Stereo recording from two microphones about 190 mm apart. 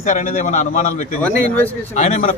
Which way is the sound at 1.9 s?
40° left (ahead or behind).